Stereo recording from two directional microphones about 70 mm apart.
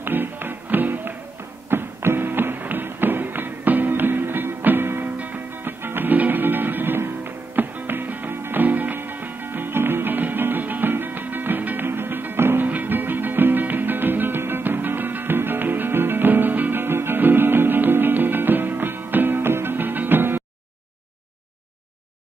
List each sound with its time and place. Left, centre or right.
0.0 s music: right